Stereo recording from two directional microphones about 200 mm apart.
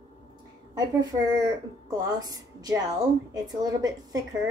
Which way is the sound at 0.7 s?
20° right (ahead or behind).